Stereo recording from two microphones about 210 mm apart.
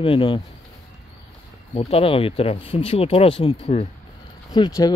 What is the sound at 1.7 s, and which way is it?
Speech, 25° left (ahead or behind).